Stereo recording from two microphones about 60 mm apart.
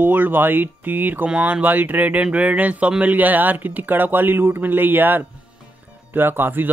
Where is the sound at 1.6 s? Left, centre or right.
Right.